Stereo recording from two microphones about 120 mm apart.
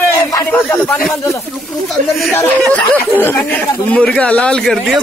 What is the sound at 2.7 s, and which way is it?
Speech, 15° left (ahead or behind).